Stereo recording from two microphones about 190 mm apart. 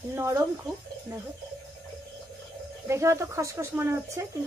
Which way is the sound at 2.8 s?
15° right (ahead or behind).